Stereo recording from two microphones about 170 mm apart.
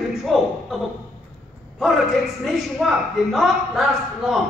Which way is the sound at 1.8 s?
Centre (ahead or behind).